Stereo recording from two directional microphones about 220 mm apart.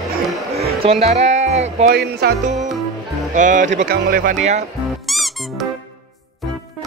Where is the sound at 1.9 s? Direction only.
45° right (ahead or behind).